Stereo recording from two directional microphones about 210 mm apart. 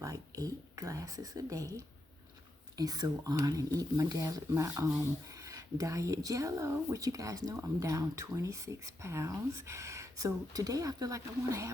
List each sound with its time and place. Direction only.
0.0 s speech: 15° right (ahead or behind)